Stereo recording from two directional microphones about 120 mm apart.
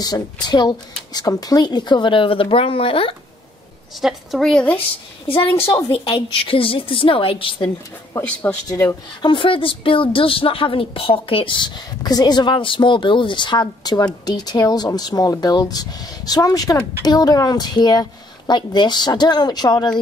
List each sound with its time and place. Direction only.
0.0 s speech: 35° left (ahead or behind)
4.0 s a woman's voice: centre (ahead or behind)
5.9 s a woman's voice: 45° left (ahead or behind)
8.6 s speech: 25° left (ahead or behind)
9.2 s speech: 45° left (ahead or behind)